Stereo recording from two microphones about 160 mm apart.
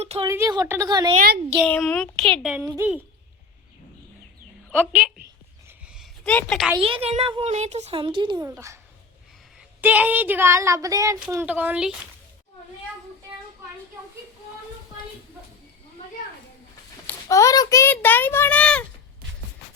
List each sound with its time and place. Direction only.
0.0 s a woman's voice: 40° right (ahead or behind)
0.3 s a woman's voice: 20° right (ahead or behind)
1.6 s a woman's voice: 10° left (ahead or behind); by 3.0 s 15° right (ahead or behind)
4.7 s a woman's voice: 10° right (ahead or behind)
5.6 s a sound: 5° right (ahead or behind)
6.2 s speech: 5° left (ahead or behind)
6.7 s a child's voice: 35° right (ahead or behind)
8.4 s a woman's voice: 15° right (ahead or behind)
17.1 s a child's voice: 20° left (ahead or behind)